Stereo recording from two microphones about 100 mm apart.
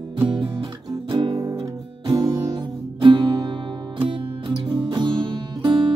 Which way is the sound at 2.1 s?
45° right (ahead or behind).